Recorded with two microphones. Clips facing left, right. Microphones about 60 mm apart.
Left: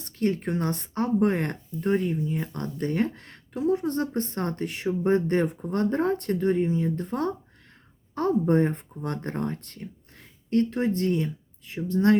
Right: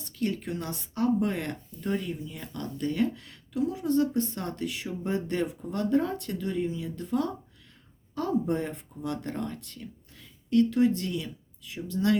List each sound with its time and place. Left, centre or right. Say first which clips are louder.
0.0 s speech: left 5 dB; left